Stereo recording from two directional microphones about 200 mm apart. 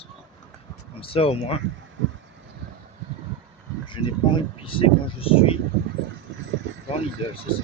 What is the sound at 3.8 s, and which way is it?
Speech, 25° left (ahead or behind).